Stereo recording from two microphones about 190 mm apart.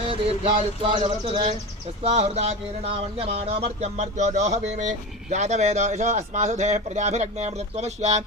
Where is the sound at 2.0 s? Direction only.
35° right (ahead or behind).